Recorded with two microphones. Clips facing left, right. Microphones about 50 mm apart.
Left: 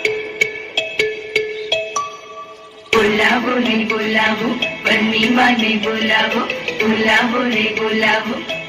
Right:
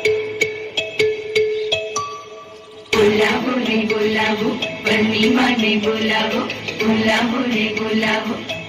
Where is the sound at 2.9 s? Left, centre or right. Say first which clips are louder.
Left 1 dB; left.